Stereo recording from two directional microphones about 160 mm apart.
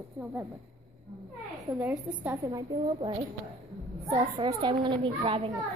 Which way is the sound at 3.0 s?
30° right (ahead or behind).